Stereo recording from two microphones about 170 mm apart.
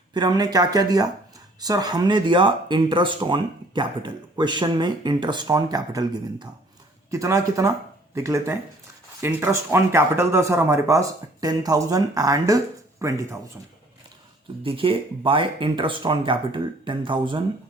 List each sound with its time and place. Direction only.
0.1 s speech: 25° right (ahead or behind)
14.6 s speech: 30° right (ahead or behind)